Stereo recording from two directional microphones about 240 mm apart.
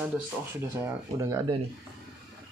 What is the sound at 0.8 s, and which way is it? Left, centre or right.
Speech, centre.